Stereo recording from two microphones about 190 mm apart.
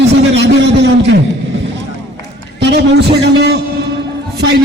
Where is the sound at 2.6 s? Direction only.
60° right (ahead or behind).